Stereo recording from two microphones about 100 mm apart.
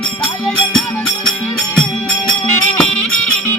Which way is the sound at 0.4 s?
5° left (ahead or behind).